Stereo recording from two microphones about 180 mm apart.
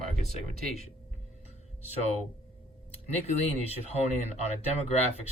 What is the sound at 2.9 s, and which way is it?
Speech, 35° left (ahead or behind).